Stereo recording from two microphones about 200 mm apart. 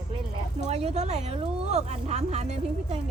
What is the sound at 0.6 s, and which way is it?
Speech, 35° right (ahead or behind).